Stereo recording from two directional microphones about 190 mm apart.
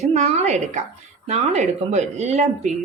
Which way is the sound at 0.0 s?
35° right (ahead or behind).